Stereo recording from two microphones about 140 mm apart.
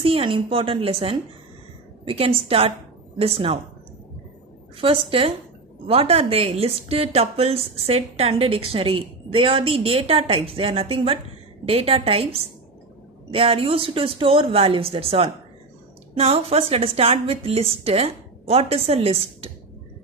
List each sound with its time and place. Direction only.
0.0 s a woman's voice: 40° right (ahead or behind)
4.7 s a woman's voice: 40° right (ahead or behind)